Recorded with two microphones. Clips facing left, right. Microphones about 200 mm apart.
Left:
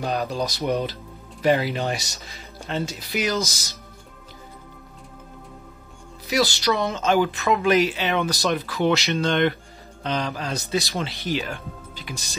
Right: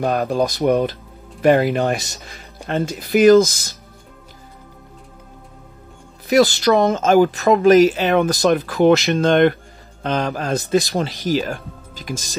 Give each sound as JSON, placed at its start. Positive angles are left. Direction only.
{"t": 0.0, "sound": "speech", "side_deg": -55}
{"t": 2.0, "sound": "speech", "side_deg": 0}
{"t": 2.2, "sound": "speech", "side_deg": -55}
{"t": 6.6, "sound": "speech", "side_deg": -55}
{"t": 11.0, "sound": "speech", "side_deg": -40}